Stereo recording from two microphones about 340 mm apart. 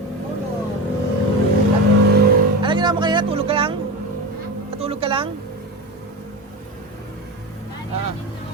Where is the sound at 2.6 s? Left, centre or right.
Centre.